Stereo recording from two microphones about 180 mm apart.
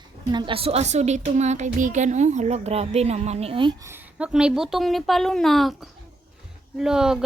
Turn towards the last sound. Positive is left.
turn(degrees=-5)  # may be behind; listen again after turning